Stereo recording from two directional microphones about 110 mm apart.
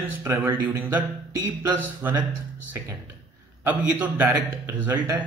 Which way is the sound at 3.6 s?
15° right (ahead or behind).